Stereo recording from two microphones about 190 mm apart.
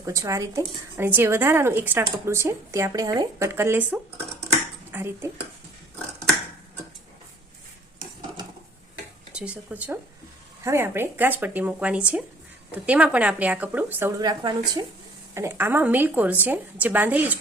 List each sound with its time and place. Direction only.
0.0 s a woman's voice: 15° right (ahead or behind)
9.3 s a woman's voice: 5° right (ahead or behind)
14.2 s a woman's voice: 20° right (ahead or behind)